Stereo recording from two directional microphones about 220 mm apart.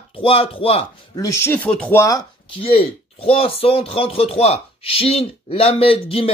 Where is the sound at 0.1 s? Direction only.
25° left (ahead or behind).